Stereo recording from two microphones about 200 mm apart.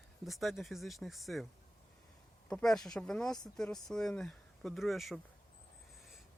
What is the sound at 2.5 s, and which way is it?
Speech, 5° left (ahead or behind).